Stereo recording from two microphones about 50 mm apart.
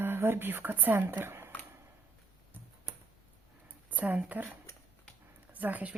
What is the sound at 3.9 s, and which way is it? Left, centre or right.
Speech, right.